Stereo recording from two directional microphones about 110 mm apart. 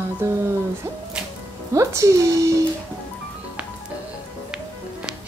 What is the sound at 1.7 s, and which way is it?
Music, 30° right (ahead or behind).